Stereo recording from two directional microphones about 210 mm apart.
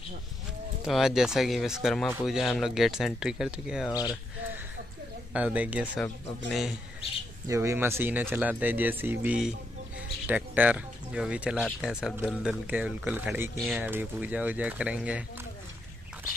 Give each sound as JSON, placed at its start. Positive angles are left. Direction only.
{"t": 0.8, "sound": "speech", "side_deg": 0}
{"t": 3.9, "sound": "speech", "side_deg": 20}
{"t": 5.3, "sound": "speech", "side_deg": -5}
{"t": 7.4, "sound": "speech", "side_deg": -15}